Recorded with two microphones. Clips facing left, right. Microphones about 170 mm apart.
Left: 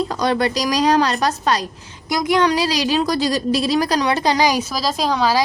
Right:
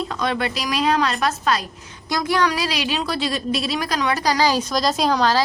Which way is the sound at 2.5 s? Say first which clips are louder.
Left 5 dB; 35° left (ahead or behind).